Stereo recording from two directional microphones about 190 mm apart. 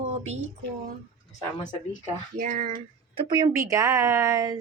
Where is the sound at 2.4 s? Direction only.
45° right (ahead or behind).